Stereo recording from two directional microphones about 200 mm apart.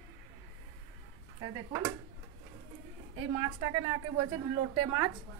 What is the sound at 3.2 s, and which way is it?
A woman's voice, 25° right (ahead or behind).